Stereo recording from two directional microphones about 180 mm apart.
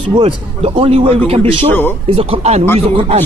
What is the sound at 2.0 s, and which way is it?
Speech, 30° right (ahead or behind).